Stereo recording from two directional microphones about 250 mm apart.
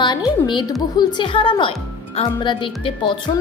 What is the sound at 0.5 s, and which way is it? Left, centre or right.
A woman's voice, centre.